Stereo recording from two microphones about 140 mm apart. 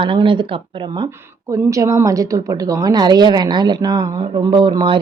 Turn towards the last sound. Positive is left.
turn(degrees=-35)  # may be behind; listen again after turning